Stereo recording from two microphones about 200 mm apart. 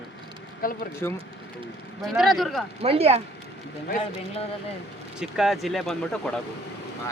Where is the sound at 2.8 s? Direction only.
30° right (ahead or behind).